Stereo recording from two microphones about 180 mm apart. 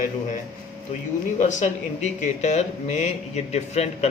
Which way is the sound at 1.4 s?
45° left (ahead or behind).